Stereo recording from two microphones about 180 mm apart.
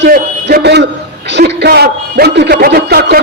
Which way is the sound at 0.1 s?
60° right (ahead or behind).